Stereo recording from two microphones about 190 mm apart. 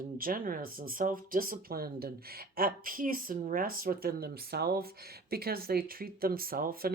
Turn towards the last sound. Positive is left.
turn(degrees=-50)  # may be behind; listen again after turning